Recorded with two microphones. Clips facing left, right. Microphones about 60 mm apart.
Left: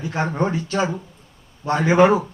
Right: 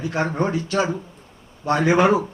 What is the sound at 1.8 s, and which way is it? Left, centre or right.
Speech, left.